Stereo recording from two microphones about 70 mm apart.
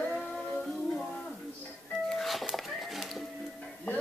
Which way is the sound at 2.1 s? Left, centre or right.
Centre.